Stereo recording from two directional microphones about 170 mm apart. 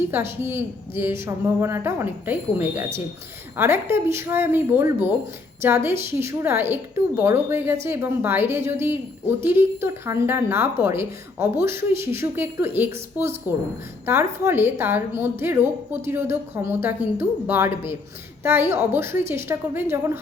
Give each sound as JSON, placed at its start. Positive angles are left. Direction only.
{"t": 0.0, "sound": "a woman's voice", "side_deg": -15}